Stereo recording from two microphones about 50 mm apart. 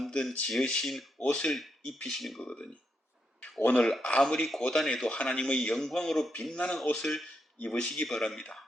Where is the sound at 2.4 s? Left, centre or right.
Centre.